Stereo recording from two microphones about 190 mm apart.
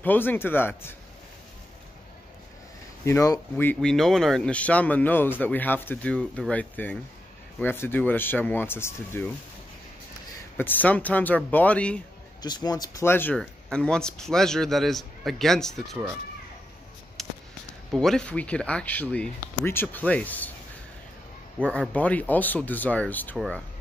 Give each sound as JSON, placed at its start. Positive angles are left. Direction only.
{"t": 0.0, "sound": "speech", "side_deg": 10}
{"t": 3.1, "sound": "speech", "side_deg": 15}
{"t": 10.6, "sound": "speech", "side_deg": 10}
{"t": 12.4, "sound": "speech", "side_deg": 20}
{"t": 17.2, "sound": "fireworks", "side_deg": 0}
{"t": 17.9, "sound": "speech", "side_deg": 0}
{"t": 21.5, "sound": "speech", "side_deg": 5}